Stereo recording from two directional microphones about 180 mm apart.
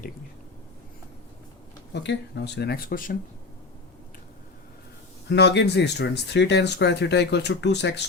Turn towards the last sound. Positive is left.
turn(degrees=70)  # may be behind; listen again after turning